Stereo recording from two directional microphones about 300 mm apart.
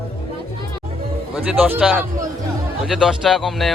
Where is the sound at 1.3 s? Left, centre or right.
Centre.